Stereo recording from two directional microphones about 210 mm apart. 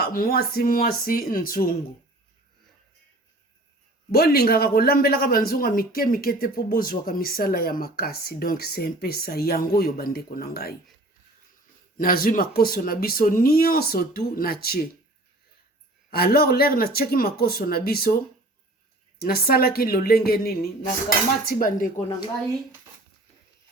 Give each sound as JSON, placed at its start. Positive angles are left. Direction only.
{"t": 0.0, "sound": "speech", "side_deg": 45}
{"t": 4.1, "sound": "speech", "side_deg": 45}
{"t": 11.9, "sound": "speech", "side_deg": 45}
{"t": 16.0, "sound": "speech", "side_deg": 45}
{"t": 19.2, "sound": "speech", "side_deg": 45}